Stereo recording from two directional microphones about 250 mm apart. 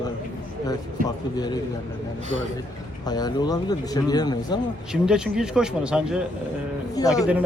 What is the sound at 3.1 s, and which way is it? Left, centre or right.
Speech, centre.